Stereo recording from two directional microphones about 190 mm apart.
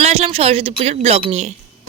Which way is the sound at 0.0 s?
30° right (ahead or behind).